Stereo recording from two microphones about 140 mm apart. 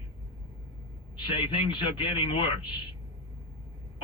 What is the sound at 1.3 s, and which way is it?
Speech, 35° left (ahead or behind).